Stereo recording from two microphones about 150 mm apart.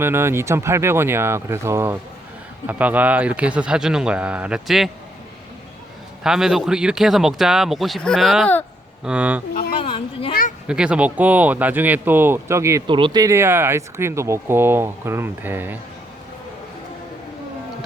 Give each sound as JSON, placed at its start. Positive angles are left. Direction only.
{"t": 0.0, "sound": "speech", "side_deg": -15}
{"t": 6.2, "sound": "speech", "side_deg": -5}
{"t": 9.7, "sound": "a sound", "side_deg": 35}
{"t": 10.7, "sound": "speech", "side_deg": -5}
{"t": 12.9, "sound": "speech", "side_deg": -30}